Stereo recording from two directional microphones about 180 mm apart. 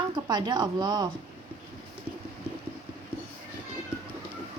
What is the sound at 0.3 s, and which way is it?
Speech, 25° right (ahead or behind).